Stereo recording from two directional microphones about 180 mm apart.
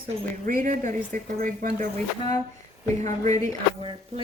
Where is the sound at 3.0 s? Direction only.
40° right (ahead or behind).